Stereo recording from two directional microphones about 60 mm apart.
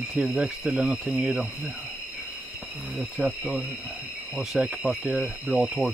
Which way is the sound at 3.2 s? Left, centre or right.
Centre.